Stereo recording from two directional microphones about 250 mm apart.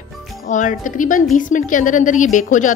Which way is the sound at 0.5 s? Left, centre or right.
Left.